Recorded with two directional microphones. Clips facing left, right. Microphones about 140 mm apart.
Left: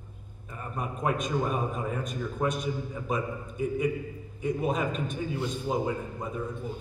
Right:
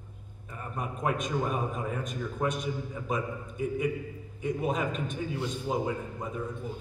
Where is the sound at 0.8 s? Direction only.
35° left (ahead or behind).